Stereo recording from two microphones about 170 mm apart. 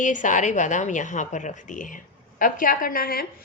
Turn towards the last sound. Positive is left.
turn(degrees=60)  # may be behind; listen again after turning